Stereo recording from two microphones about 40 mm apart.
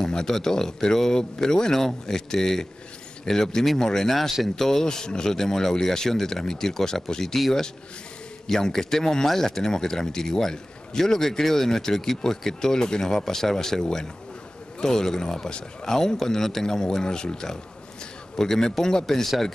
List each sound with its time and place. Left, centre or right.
0.0 s speech: centre
8.5 s speech: centre